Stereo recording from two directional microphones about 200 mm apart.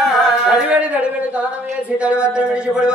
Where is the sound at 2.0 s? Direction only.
5° right (ahead or behind).